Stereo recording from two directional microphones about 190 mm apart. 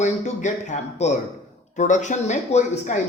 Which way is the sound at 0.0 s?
40° left (ahead or behind).